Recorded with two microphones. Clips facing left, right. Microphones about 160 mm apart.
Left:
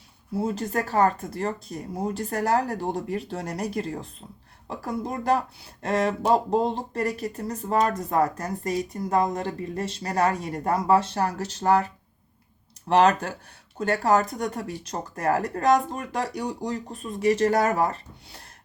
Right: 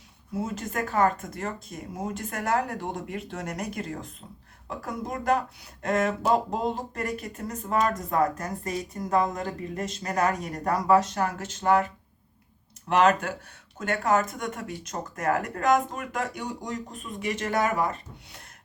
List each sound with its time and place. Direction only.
0.3 s speech: 30° left (ahead or behind)
12.9 s speech: 35° left (ahead or behind)